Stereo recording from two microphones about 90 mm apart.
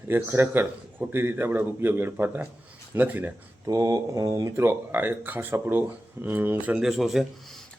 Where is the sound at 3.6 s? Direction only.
40° right (ahead or behind).